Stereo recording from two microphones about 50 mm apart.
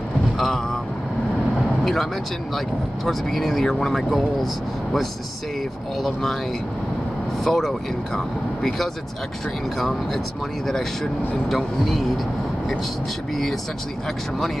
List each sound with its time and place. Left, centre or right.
3.1 s speech: centre
7.4 s speech: centre
9.8 s speech: centre
11.4 s speech: centre